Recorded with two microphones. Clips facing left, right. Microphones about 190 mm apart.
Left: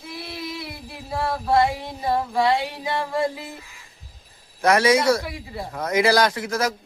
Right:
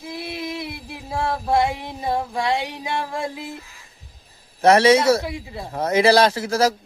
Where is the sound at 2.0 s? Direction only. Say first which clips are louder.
Left 2 dB; 20° right (ahead or behind).